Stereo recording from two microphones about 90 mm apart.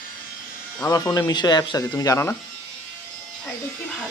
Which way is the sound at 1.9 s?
40° left (ahead or behind).